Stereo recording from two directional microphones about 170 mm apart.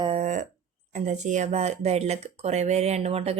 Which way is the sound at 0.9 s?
45° right (ahead or behind).